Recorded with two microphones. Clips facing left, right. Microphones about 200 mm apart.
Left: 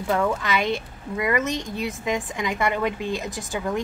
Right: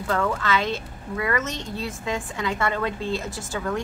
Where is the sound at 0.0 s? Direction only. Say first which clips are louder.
Left 2 dB; 15° left (ahead or behind).